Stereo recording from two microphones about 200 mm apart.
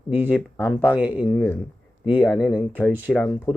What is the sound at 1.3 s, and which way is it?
Speech, 10° left (ahead or behind).